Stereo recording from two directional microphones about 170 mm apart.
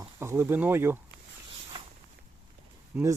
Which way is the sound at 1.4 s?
30° right (ahead or behind).